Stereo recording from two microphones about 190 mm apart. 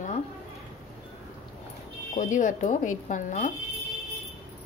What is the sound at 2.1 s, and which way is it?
Speech, 40° left (ahead or behind).